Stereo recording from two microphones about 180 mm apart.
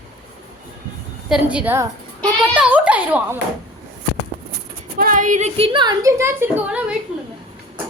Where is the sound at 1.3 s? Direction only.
5° right (ahead or behind).